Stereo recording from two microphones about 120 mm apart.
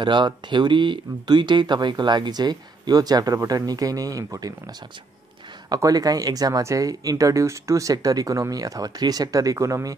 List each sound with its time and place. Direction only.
0.0 s speech: 40° right (ahead or behind)
5.7 s speech: 30° right (ahead or behind)